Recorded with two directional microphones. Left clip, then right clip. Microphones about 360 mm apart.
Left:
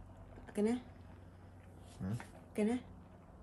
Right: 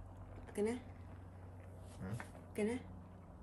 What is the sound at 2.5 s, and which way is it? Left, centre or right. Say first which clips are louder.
Speech: left 3 dB; left.